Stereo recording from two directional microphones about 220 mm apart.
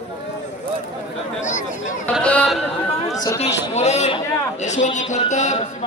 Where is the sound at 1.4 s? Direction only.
35° left (ahead or behind).